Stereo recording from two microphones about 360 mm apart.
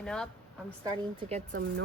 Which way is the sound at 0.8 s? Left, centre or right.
Centre.